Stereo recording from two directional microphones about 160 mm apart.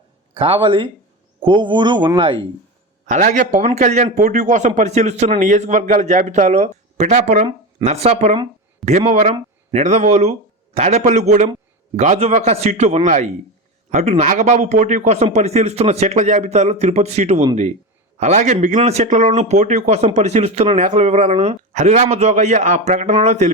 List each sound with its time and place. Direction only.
0.3 s speech: 35° right (ahead or behind)
3.1 s speech: 50° right (ahead or behind)